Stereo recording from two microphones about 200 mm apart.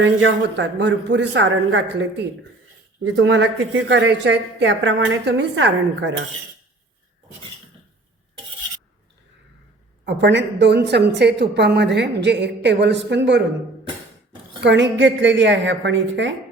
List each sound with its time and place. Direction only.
0.0 s a woman's voice: 70° right (ahead or behind)
10.1 s a woman's voice: 60° right (ahead or behind)
14.6 s a woman's voice: 60° right (ahead or behind)